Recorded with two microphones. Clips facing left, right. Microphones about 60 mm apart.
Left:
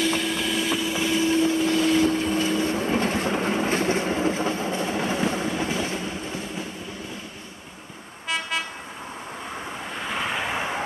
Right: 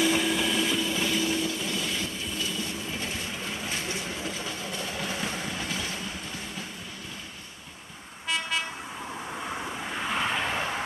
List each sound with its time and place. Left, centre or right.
0.0 s vehicle: centre; by 1.7 s left
1.7 s vehicle: left
9.9 s vehicle: centre